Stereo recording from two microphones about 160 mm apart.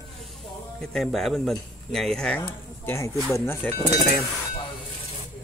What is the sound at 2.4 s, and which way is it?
Speech, 15° left (ahead or behind).